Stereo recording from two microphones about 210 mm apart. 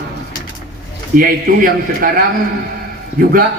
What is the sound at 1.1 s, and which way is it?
A man's voice, 40° right (ahead or behind).